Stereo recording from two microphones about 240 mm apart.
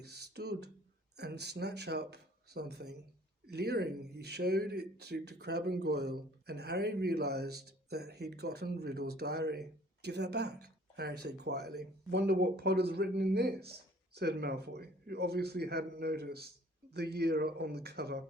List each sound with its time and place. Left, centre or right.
0.0 s speech: right